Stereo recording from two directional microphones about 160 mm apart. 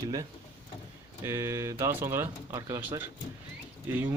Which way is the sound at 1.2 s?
15° right (ahead or behind).